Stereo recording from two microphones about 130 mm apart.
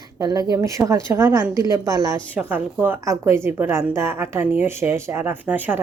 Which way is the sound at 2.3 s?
15° right (ahead or behind).